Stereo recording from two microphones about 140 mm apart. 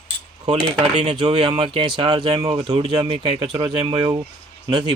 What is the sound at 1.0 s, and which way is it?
Speech, 40° right (ahead or behind).